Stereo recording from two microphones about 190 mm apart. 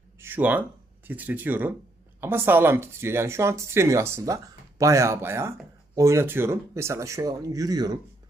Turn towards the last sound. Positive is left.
turn(degrees=-20)  # may be behind; listen again after turning